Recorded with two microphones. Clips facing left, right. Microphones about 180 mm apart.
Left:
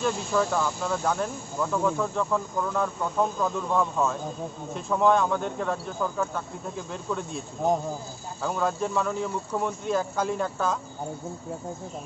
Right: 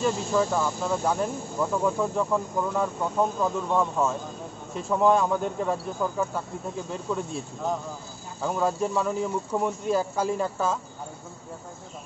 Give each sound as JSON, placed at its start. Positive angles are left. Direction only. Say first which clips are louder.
{"t": 0.0, "sound": "speech", "louder": "right 1 dB", "side_deg": -10}
{"t": 8.5, "sound": "speech", "louder": "right 2 dB", "side_deg": -5}